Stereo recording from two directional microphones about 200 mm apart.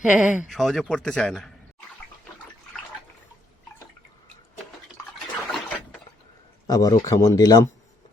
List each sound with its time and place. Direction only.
0.0 s speech: 5° right (ahead or behind)
5.5 s a sound: centre (ahead or behind)
6.7 s speech: 20° left (ahead or behind)